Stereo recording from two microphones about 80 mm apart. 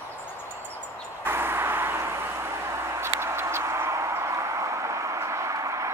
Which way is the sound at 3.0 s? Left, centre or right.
Right.